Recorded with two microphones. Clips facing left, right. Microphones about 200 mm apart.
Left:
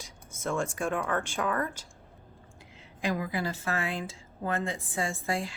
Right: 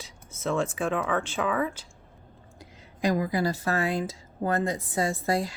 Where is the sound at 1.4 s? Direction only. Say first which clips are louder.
Right 4 dB; 5° right (ahead or behind).